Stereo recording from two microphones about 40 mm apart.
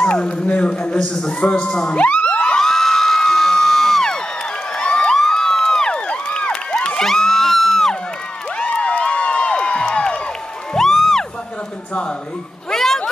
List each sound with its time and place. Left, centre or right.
0.0 s a sound: left
0.7 s speech: left
2.0 s a sound: left
2.5 s crowd: centre
4.7 s cheering: left
5.1 s crowd: centre
5.9 s crowd: left
7.0 s crowd: centre
8.5 s music: left
10.7 s music: centre
12.7 s a sound: centre